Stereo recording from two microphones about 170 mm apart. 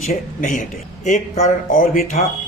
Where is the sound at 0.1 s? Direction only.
50° left (ahead or behind).